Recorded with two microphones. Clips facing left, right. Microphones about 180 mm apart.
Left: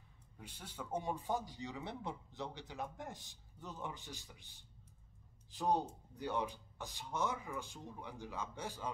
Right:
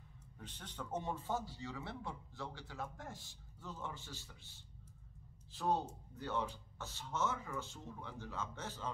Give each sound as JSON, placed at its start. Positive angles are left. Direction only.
{"t": 0.4, "sound": "a man's voice", "side_deg": 10}